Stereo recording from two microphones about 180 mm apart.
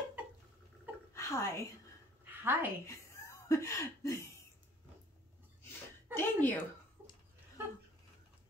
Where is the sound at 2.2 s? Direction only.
10° right (ahead or behind).